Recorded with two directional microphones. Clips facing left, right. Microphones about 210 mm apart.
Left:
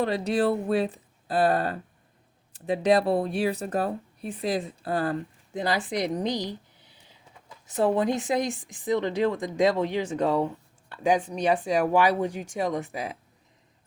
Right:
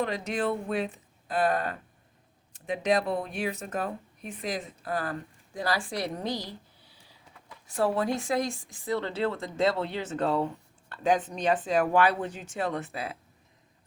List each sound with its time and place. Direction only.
0.0 s speech: 35° left (ahead or behind); by 13.1 s 15° left (ahead or behind)